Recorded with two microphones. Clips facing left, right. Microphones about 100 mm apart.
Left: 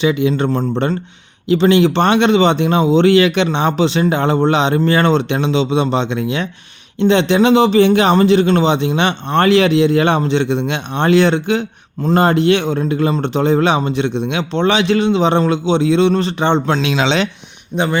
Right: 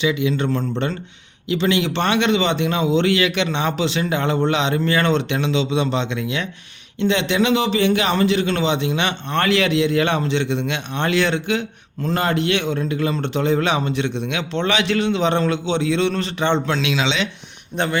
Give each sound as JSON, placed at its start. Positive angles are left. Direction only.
{"t": 0.0, "sound": "a man's voice", "side_deg": 35}
{"t": 17.0, "sound": "speech", "side_deg": 45}